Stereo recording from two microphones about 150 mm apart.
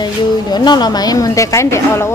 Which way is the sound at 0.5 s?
30° left (ahead or behind).